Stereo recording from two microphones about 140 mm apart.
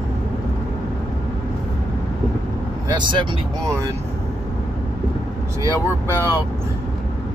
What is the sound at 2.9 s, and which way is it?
Speech, 35° right (ahead or behind).